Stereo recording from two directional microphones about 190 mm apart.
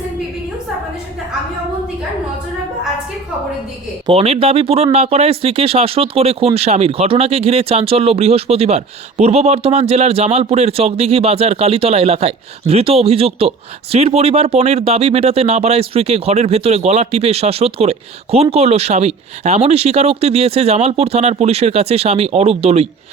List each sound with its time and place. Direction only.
4.0 s speech: 30° right (ahead or behind)